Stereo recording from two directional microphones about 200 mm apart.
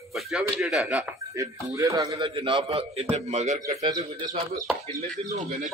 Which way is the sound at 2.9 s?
30° right (ahead or behind).